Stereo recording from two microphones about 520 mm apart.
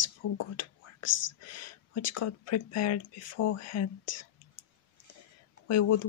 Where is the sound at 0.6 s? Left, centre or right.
Left.